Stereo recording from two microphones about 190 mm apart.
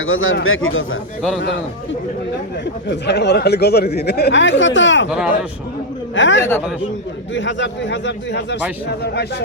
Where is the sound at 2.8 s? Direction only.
65° left (ahead or behind).